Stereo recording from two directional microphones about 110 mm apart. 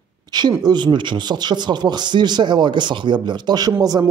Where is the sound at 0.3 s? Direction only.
40° right (ahead or behind).